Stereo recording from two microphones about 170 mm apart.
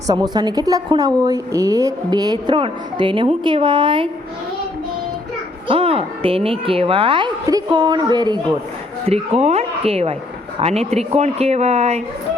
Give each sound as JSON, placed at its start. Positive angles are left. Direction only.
{"t": 0.1, "sound": "a woman's voice", "side_deg": -25}
{"t": 5.6, "sound": "a woman's voice", "side_deg": -35}
{"t": 9.0, "sound": "speech", "side_deg": -40}